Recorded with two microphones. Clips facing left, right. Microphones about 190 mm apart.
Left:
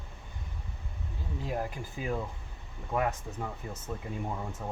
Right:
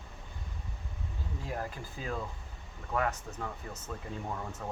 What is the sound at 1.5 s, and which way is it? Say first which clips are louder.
Speech: left 4 dB; 15° left (ahead or behind).